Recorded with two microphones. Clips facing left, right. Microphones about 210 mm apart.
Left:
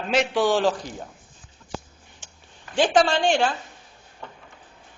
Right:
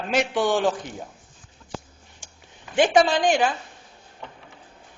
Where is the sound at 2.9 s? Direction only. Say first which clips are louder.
Even; 5° right (ahead or behind).